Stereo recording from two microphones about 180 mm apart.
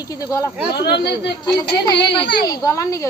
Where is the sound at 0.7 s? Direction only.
65° left (ahead or behind).